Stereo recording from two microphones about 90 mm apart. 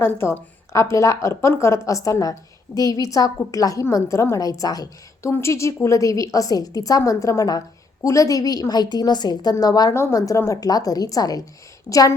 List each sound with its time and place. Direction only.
0.0 s a woman's voice: 30° left (ahead or behind)
5.3 s a woman's voice: 30° left (ahead or behind); by 9.9 s 45° left (ahead or behind)
9.9 s a woman's voice: 30° left (ahead or behind)